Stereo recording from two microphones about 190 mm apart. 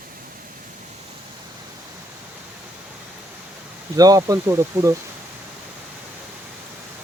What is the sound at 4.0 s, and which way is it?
Speech, 20° right (ahead or behind).